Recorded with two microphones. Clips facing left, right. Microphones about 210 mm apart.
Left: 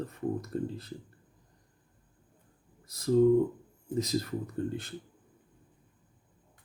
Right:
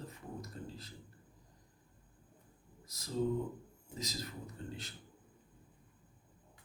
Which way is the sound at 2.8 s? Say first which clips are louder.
Left 13 dB; 55° left (ahead or behind).